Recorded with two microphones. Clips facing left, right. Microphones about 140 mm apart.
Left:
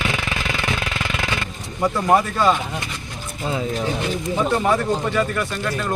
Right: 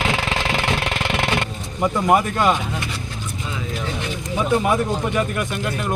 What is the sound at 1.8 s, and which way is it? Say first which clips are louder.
Speech: even; 10° right (ahead or behind).